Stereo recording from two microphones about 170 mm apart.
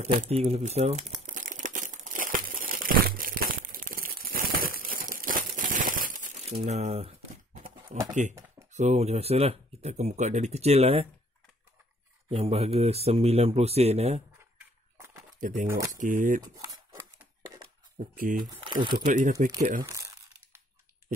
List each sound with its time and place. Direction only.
0.0 s crumpling: 40° right (ahead or behind)
8.1 s speech: 45° right (ahead or behind)
12.3 s speech: 35° right (ahead or behind)
15.6 s speech: 15° right (ahead or behind)
16.0 s speech: 50° right (ahead or behind)
16.5 s crumpling: 20° right (ahead or behind)
17.9 s speech: 55° right (ahead or behind)
18.5 s crumpling: 25° right (ahead or behind)
19.0 s speech: 50° right (ahead or behind)
19.8 s speech: 20° right (ahead or behind)